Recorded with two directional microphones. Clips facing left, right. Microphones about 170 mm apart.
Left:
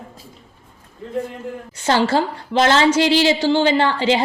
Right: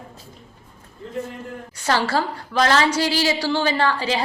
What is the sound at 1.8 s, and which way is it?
A woman's voice, 25° left (ahead or behind).